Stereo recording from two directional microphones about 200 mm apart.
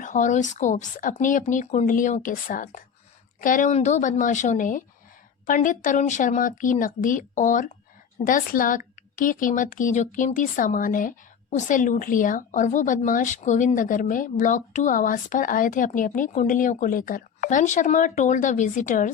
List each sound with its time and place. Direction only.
0.0 s speech: 40° left (ahead or behind)